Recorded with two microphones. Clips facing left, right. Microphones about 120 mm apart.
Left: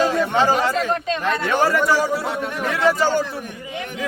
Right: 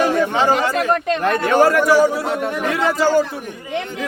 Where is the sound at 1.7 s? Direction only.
15° right (ahead or behind).